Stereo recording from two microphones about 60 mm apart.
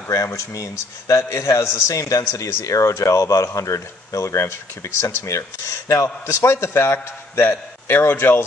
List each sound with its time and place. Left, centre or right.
0.1 s a man's voice: left
6.2 s a man's voice: left